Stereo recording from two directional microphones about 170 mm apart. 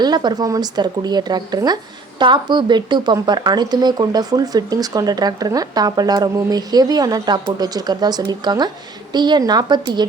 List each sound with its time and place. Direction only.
0.0 s speech: 25° right (ahead or behind)